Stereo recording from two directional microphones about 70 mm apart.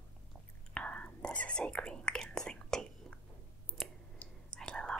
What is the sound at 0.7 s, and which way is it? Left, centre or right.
Whispering, centre.